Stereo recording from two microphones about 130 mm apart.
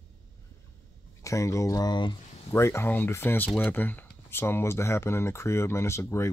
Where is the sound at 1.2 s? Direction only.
25° left (ahead or behind).